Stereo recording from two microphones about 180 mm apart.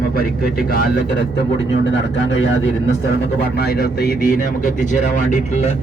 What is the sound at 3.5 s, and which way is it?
Speech, 60° left (ahead or behind).